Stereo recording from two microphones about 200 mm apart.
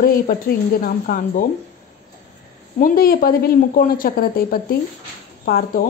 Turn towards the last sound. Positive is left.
turn(degrees=45)  # may be behind; listen again after turning